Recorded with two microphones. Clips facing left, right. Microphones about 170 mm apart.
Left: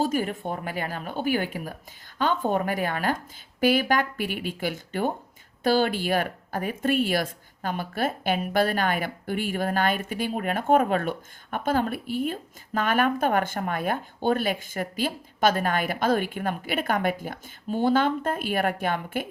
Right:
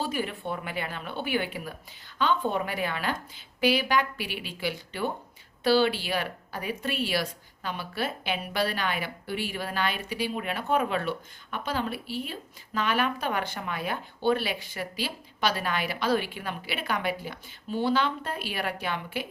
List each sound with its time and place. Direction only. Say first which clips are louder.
0.0 s speech: left 5 dB; 45° left (ahead or behind)